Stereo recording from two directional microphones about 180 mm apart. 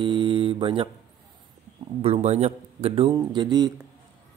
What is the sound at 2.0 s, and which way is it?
A man's voice, 35° right (ahead or behind).